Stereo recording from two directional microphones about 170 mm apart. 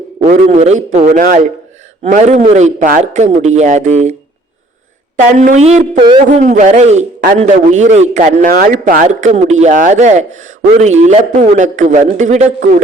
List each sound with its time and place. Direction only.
0.2 s a man's voice: 40° right (ahead or behind)
5.4 s a man's voice: 40° right (ahead or behind)